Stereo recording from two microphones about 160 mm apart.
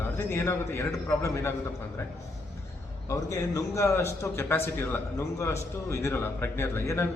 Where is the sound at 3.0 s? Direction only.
20° left (ahead or behind).